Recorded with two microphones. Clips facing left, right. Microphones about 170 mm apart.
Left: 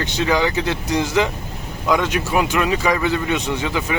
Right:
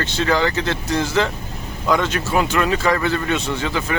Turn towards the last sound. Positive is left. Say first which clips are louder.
# even
turn(degrees=15)  # may be behind; listen again after turning